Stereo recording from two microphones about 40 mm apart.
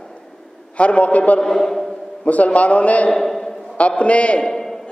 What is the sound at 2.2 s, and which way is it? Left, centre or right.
Speech, left.